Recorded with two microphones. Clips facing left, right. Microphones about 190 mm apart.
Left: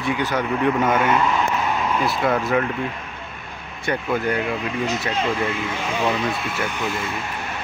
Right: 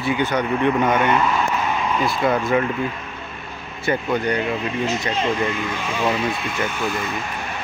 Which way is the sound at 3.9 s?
5° left (ahead or behind).